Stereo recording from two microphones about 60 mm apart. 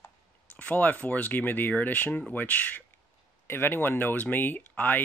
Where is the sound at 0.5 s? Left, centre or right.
Left.